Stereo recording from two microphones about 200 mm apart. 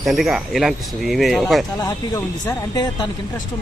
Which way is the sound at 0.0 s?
Centre (ahead or behind).